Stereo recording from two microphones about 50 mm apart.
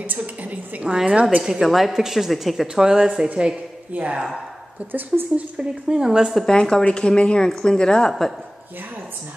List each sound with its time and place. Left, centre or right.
0.0 s a woman's voice: right
0.8 s a woman's voice: centre
1.4 s a woman's voice: centre; by 4.2 s right
5.3 s a woman's voice: centre
6.5 s a woman's voice: left